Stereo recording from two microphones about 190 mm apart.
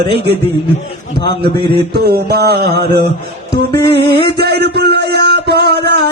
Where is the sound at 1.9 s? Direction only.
55° right (ahead or behind).